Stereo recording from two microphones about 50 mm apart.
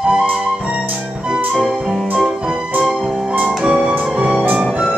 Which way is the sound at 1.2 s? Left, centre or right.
Right.